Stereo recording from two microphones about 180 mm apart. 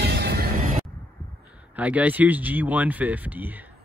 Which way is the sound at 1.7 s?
10° right (ahead or behind).